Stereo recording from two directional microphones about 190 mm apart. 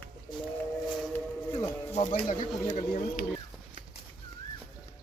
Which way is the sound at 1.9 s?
35° left (ahead or behind).